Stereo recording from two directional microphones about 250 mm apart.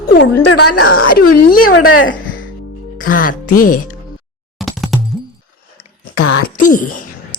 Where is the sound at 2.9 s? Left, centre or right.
Left.